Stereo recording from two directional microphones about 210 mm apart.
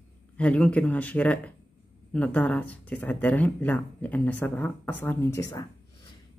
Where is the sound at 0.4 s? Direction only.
5° left (ahead or behind).